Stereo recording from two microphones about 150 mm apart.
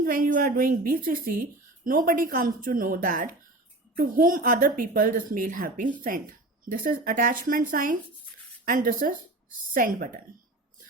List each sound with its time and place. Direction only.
0.0 s speech: 70° right (ahead or behind)